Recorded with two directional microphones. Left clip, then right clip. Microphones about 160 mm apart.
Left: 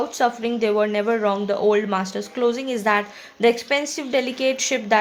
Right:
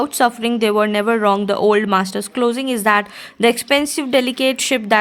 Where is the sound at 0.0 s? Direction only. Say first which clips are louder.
Right 5 dB; 55° right (ahead or behind).